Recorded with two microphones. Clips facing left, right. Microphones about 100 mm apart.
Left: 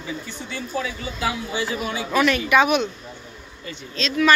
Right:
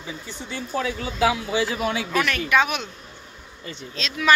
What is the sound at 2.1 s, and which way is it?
Speech, 10° left (ahead or behind).